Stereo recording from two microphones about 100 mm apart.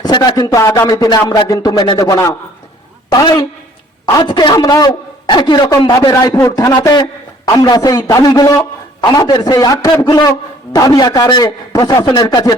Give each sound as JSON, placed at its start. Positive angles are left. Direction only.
{"t": 0.0, "sound": "speech", "side_deg": 45}
{"t": 0.9, "sound": "a man's voice", "side_deg": 40}
{"t": 4.5, "sound": "a man's voice", "side_deg": 40}
{"t": 6.1, "sound": "a man's voice", "side_deg": 30}